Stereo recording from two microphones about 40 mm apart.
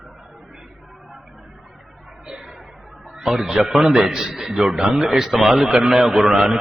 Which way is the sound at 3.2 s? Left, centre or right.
Centre.